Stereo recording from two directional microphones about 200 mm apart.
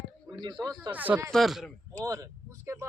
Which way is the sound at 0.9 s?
10° right (ahead or behind).